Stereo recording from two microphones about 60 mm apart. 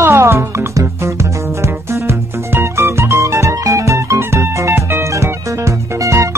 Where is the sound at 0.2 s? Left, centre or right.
Right.